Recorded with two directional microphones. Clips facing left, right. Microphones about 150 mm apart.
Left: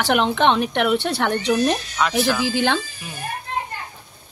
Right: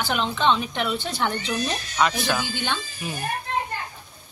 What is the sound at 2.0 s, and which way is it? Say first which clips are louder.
Speech: right 2 dB; centre (ahead or behind).